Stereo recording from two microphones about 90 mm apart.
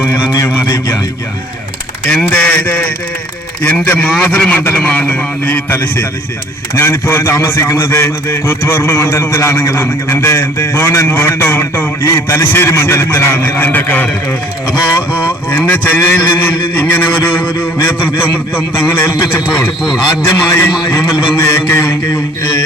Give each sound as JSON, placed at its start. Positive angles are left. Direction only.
{"t": 0.4, "sound": "a sound", "side_deg": 25}
{"t": 2.1, "sound": "a man's voice", "side_deg": 20}
{"t": 9.4, "sound": "a man's voice", "side_deg": 35}
{"t": 15.4, "sound": "a man's voice", "side_deg": 20}
{"t": 20.2, "sound": "a man's voice", "side_deg": 35}